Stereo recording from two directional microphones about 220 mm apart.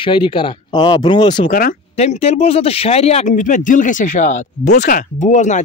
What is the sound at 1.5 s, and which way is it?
Speech, 40° left (ahead or behind).